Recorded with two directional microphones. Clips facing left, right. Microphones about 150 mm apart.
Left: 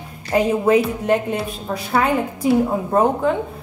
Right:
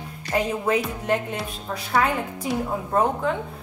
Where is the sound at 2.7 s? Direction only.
30° left (ahead or behind).